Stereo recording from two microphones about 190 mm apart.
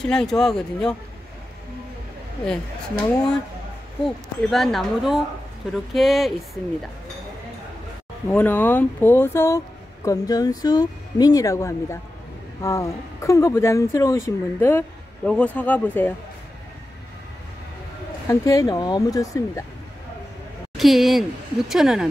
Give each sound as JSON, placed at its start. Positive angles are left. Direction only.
{"t": 0.0, "sound": "speech", "side_deg": 5}
{"t": 4.0, "sound": "speech", "side_deg": 0}
{"t": 8.3, "sound": "speech", "side_deg": 10}
{"t": 18.2, "sound": "speech", "side_deg": 15}
{"t": 20.7, "sound": "speech", "side_deg": 0}